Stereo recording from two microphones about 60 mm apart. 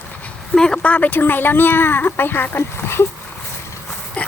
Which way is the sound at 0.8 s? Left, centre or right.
Left.